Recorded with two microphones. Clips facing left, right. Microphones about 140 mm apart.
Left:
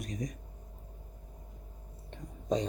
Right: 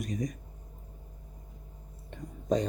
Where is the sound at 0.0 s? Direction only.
5° right (ahead or behind).